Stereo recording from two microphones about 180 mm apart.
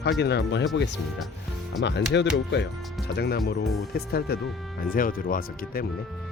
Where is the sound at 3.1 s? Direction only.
65° left (ahead or behind).